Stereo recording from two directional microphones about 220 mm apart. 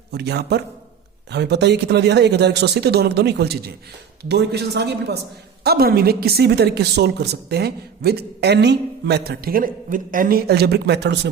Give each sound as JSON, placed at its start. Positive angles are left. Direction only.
{"t": 0.1, "sound": "a woman's voice", "side_deg": -50}